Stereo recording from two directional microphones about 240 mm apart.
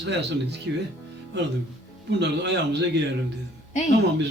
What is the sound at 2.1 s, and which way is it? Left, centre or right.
Speech, right.